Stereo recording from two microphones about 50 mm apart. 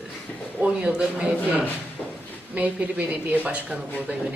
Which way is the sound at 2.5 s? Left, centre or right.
Right.